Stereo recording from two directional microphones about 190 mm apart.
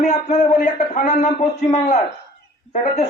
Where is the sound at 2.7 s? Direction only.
35° left (ahead or behind).